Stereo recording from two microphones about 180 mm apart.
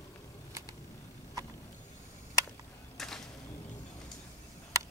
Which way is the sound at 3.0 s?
Centre (ahead or behind).